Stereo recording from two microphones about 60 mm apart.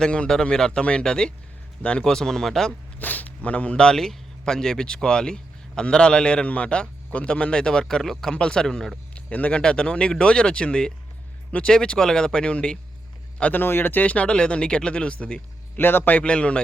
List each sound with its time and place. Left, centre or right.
0.0 s speech: centre
3.0 s speech: left; by 8.9 s centre
9.1 s speech: left
13.5 s speech: left; by 15.8 s centre
15.8 s speech: left; by 16.6 s centre